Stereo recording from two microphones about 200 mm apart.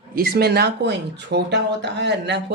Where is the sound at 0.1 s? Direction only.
50° right (ahead or behind).